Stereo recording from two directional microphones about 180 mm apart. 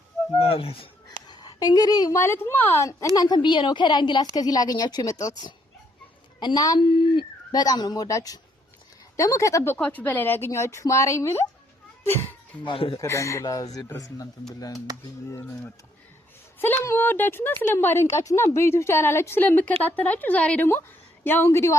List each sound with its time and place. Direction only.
0.3 s a woman's voice: 30° left (ahead or behind)
6.4 s a woman's voice: 20° left (ahead or behind)
12.6 s a woman's voice: 30° left (ahead or behind)
13.0 s a woman's voice: 15° left (ahead or behind)
15.3 s speech: 15° left (ahead or behind)